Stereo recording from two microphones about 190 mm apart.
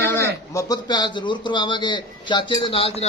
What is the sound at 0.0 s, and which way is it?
Speech, 15° left (ahead or behind).